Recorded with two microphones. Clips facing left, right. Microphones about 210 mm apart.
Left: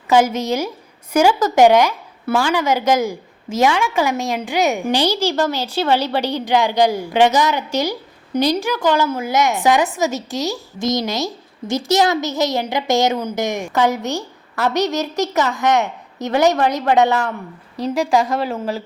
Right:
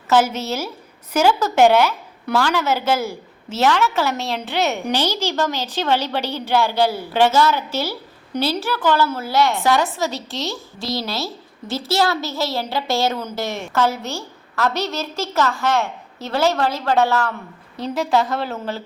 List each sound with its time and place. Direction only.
0.1 s a woman's voice: 10° left (ahead or behind)
17.8 s a woman's voice: centre (ahead or behind)